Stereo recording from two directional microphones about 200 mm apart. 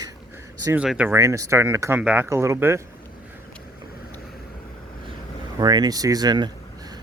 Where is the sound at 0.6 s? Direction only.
5° right (ahead or behind).